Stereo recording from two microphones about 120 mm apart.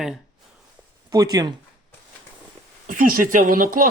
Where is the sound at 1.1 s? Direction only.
30° right (ahead or behind).